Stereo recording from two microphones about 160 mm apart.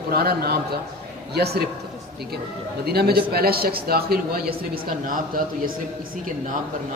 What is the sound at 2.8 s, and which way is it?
A man's voice, 80° right.